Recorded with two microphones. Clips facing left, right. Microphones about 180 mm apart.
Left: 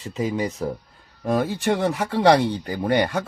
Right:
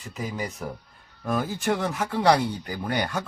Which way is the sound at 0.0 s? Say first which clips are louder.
Left 7 dB; 25° left (ahead or behind).